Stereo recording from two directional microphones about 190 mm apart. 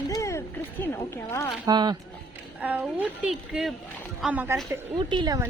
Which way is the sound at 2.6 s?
10° right (ahead or behind).